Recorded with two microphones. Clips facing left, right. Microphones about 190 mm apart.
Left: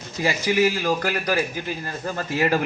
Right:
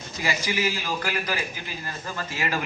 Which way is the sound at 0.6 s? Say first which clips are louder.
Left 7 dB; 50° left (ahead or behind).